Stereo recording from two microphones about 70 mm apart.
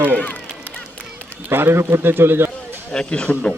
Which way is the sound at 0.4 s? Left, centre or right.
Right.